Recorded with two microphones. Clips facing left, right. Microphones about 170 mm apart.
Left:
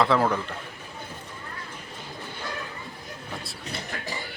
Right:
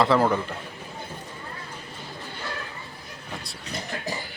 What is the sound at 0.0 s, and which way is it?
Speech, centre (ahead or behind).